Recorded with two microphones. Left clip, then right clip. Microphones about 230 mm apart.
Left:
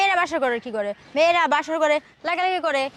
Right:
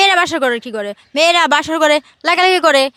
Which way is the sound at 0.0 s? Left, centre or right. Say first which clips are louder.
Right 8 dB; right.